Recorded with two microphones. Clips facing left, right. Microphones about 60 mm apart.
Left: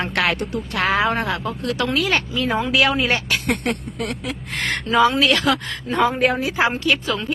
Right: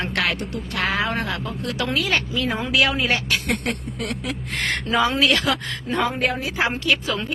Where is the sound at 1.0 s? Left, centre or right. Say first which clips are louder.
Left 4 dB; centre.